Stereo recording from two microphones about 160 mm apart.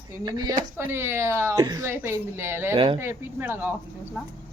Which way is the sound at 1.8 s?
15° right (ahead or behind).